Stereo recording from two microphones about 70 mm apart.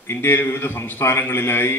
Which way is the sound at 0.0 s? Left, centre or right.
Left.